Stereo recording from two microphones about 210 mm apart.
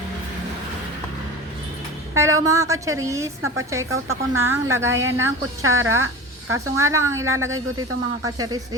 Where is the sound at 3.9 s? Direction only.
75° right (ahead or behind).